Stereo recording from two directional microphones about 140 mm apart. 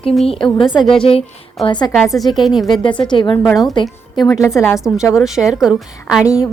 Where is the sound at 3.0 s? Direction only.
35° left (ahead or behind).